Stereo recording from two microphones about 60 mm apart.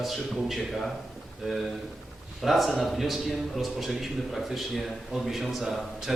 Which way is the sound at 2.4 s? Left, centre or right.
Centre.